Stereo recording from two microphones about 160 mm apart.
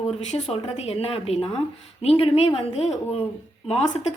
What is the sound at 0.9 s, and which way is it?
A woman's voice, 40° left (ahead or behind).